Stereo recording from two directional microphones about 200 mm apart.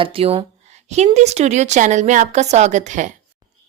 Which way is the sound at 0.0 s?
30° right (ahead or behind).